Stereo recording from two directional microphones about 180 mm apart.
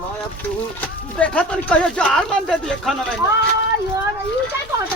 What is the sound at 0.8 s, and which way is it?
Speech, 5° left (ahead or behind).